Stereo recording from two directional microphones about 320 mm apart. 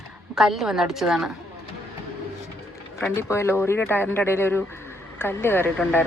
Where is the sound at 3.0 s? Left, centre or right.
Centre.